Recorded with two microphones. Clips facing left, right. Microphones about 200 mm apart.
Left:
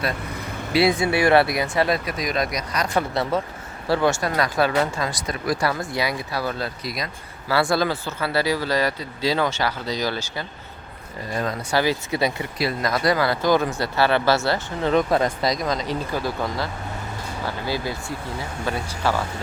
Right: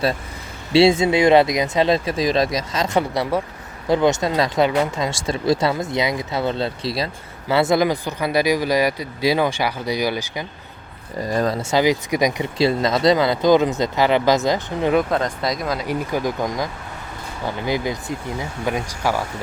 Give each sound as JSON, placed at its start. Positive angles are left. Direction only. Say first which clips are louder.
{"t": 0.7, "sound": "speech", "louder": "right 5 dB", "side_deg": -25}
{"t": 11.3, "sound": "speech", "louder": "right 6 dB", "side_deg": -40}
{"t": 11.7, "sound": "speech", "louder": "right 3 dB", "side_deg": -15}
{"t": 15.1, "sound": "speech", "louder": "left 1 dB", "side_deg": 5}